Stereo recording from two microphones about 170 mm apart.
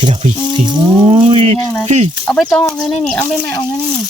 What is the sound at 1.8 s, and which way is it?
Speech, 45° right (ahead or behind).